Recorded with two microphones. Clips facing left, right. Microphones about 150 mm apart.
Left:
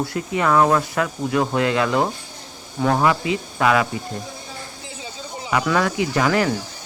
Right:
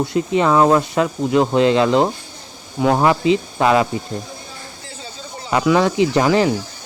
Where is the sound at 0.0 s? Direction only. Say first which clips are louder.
Right 5 dB; 20° right (ahead or behind).